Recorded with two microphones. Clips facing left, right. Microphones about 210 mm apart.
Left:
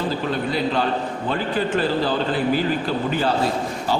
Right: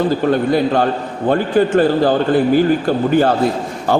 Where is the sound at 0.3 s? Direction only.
50° right (ahead or behind).